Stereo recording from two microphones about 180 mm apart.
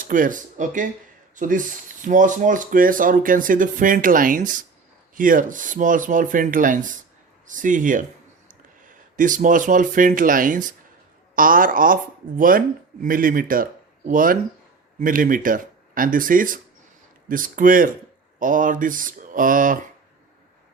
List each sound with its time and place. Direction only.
0.0 s speech: 50° right (ahead or behind)